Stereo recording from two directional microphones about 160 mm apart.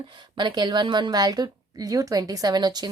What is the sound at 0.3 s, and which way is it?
A woman's voice, 30° right (ahead or behind).